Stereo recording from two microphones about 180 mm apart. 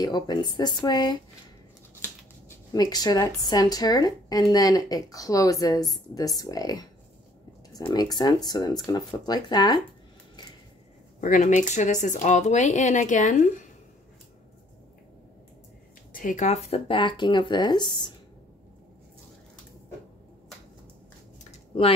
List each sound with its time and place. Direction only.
0.0 s speech: 25° left (ahead or behind)
2.7 s speech: 20° left (ahead or behind)
7.9 s speech: 20° left (ahead or behind)
11.1 s speech: 45° left (ahead or behind)
16.1 s speech: 50° left (ahead or behind); by 17.9 s 25° left (ahead or behind)
21.5 s a sound: 30° left (ahead or behind)